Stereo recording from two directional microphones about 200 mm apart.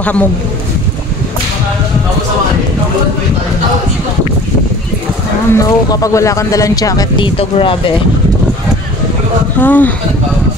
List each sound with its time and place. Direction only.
0.0 s speech: 5° left (ahead or behind)
5.5 s speech: 15° left (ahead or behind)
9.6 s speech: 10° left (ahead or behind)